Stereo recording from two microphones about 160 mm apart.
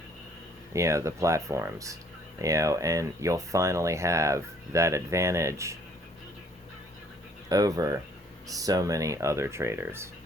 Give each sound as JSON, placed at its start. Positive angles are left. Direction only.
{"t": 0.7, "sound": "speech", "side_deg": -20}
{"t": 7.5, "sound": "speech", "side_deg": -20}